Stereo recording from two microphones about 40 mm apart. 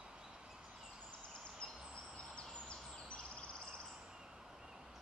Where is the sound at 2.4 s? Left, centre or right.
Left.